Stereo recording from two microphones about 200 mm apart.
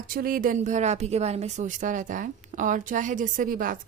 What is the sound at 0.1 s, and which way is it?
A woman's voice, 45° right (ahead or behind).